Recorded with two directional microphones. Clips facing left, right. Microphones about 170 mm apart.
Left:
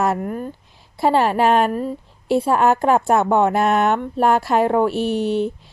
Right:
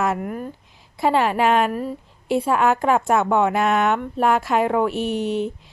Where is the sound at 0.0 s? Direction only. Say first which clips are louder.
Left 2 dB; 35° left (ahead or behind).